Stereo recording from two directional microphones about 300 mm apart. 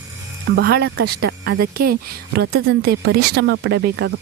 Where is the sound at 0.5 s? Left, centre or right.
Right.